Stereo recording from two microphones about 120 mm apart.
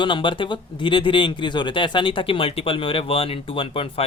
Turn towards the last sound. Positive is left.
turn(degrees=50)  # may be behind; listen again after turning